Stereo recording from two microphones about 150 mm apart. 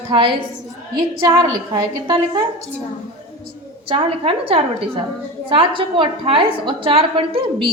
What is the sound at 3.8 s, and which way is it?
A woman's voice, 40° right (ahead or behind).